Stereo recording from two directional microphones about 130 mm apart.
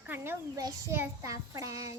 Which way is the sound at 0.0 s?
15° right (ahead or behind).